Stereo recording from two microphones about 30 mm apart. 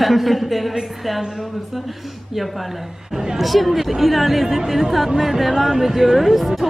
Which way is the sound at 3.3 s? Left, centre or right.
Centre.